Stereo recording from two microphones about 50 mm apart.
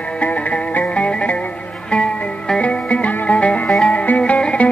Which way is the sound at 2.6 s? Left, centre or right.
Left.